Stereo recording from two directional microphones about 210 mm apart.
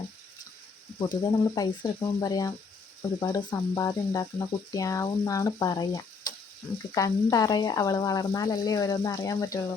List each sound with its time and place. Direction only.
1.2 s speech: 20° left (ahead or behind)